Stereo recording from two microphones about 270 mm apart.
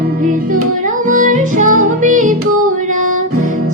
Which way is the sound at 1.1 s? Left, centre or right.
Right.